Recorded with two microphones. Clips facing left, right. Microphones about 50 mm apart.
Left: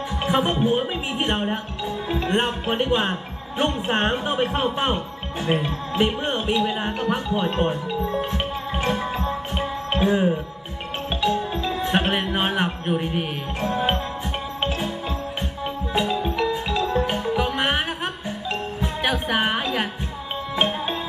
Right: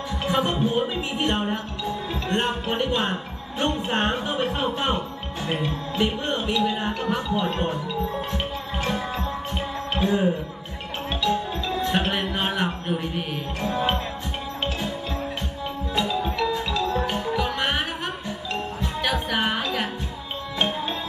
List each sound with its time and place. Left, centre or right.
0.2 s speech: centre
8.4 s music: left
8.9 s music: centre
9.9 s speech: left
14.6 s music: centre